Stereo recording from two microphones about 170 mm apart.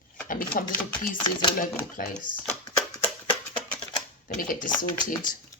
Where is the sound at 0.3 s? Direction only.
55° left (ahead or behind).